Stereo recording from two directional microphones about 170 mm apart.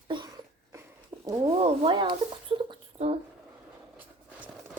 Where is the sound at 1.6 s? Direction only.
35° right (ahead or behind).